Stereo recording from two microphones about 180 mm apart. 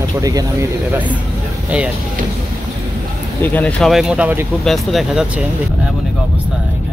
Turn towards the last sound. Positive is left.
turn(degrees=0)  # may be behind; listen again after turning